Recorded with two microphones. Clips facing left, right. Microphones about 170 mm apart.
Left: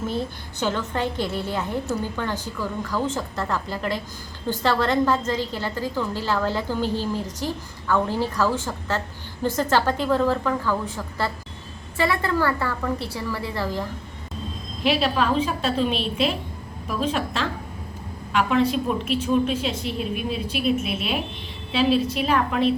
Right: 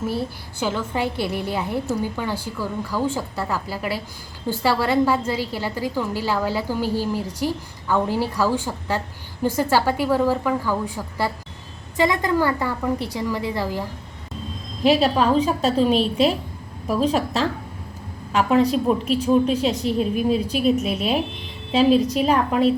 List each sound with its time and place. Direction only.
0.6 s a woman's voice: 10° right (ahead or behind)
14.8 s a woman's voice: 40° right (ahead or behind)